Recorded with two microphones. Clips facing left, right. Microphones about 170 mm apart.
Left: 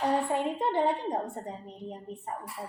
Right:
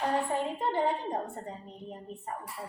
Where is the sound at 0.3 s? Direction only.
20° left (ahead or behind).